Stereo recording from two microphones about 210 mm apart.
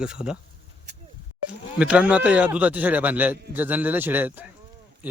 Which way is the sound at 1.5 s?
5° right (ahead or behind).